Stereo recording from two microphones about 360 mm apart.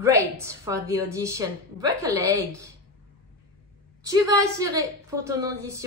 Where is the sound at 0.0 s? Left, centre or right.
Centre.